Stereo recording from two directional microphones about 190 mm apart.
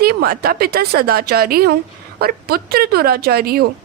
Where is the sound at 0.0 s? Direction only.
55° right (ahead or behind).